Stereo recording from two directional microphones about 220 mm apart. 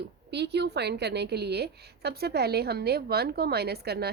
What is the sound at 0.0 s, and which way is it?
A woman's voice, 50° right (ahead or behind).